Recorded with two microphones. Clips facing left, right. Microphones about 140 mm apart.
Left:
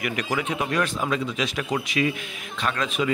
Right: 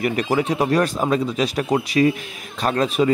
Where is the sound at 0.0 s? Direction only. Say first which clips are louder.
Right 7 dB; 35° right (ahead or behind).